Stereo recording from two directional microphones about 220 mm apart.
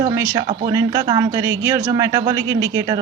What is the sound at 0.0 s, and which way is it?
Speech, 15° right (ahead or behind).